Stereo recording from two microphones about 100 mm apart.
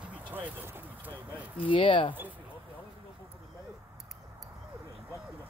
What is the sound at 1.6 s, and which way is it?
Speech, 60° left (ahead or behind).